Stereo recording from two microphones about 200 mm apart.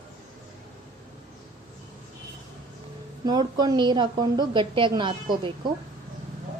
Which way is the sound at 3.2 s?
20° right (ahead or behind).